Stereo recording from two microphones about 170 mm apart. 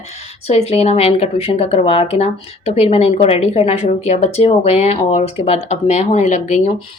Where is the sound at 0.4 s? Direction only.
40° left (ahead or behind).